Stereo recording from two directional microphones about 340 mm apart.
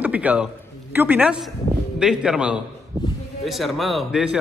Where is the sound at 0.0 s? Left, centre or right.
Centre.